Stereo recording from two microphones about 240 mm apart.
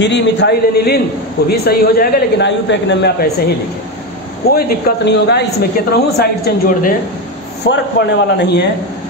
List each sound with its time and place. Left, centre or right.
0.0 s a man's voice: left